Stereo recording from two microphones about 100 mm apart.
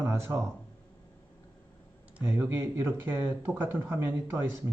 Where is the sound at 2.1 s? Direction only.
20° right (ahead or behind).